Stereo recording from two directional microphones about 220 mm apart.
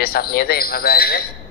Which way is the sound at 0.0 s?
45° left (ahead or behind).